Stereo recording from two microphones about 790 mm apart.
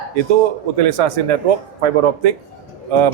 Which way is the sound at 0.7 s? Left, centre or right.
Right.